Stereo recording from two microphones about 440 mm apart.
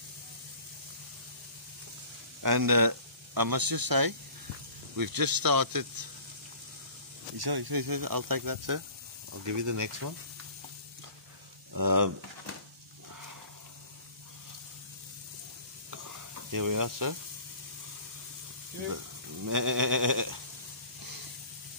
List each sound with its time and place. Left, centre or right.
2.4 s speech: right
7.3 s speech: right
11.7 s speech: right
15.9 s stir: right
18.9 s speech: right